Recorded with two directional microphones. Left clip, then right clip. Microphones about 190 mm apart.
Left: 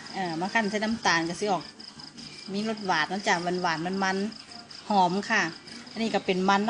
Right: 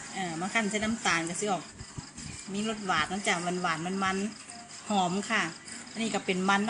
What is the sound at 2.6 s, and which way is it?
Speech, 15° left (ahead or behind).